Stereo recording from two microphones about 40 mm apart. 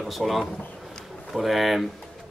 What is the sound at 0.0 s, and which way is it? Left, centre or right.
A man's voice, centre.